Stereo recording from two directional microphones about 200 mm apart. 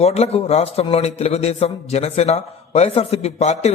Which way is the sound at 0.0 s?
30° left (ahead or behind).